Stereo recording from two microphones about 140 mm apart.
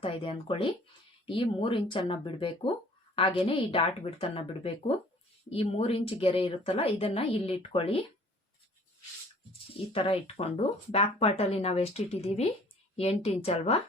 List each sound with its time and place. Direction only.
0.0 s a woman's voice: 40° left (ahead or behind)
9.5 s speech: 40° left (ahead or behind)